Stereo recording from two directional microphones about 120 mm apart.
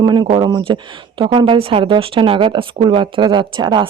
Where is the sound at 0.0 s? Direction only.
40° right (ahead or behind).